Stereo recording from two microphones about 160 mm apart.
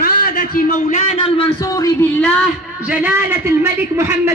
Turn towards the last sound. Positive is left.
turn(degrees=-15)  # may be behind; listen again after turning